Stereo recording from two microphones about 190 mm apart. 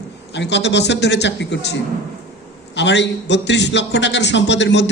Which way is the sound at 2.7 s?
70° left (ahead or behind).